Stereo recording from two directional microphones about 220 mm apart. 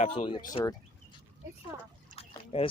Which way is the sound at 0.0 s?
25° left (ahead or behind).